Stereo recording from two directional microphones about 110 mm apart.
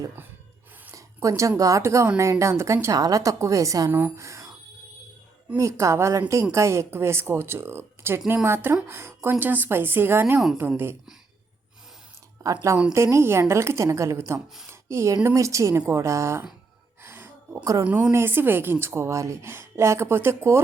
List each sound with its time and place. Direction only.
0.9 s a woman's voice: 30° right (ahead or behind)
5.5 s a woman's voice: 30° right (ahead or behind)
12.4 s a woman's voice: 30° right (ahead or behind)
17.0 s gasp: 20° right (ahead or behind)
17.6 s a woman's voice: 30° right (ahead or behind)
17.8 s a woman's voice: 10° right (ahead or behind)